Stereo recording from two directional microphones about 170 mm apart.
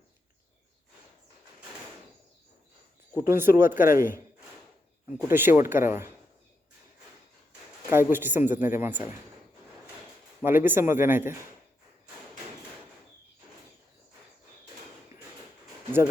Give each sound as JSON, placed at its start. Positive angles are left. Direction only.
{"t": 3.2, "sound": "a man's voice", "side_deg": -15}
{"t": 5.3, "sound": "a man's voice", "side_deg": -10}
{"t": 7.9, "sound": "a man's voice", "side_deg": -15}
{"t": 10.4, "sound": "a man's voice", "side_deg": -10}